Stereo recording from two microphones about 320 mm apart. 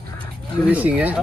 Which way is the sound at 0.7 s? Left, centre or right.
Centre.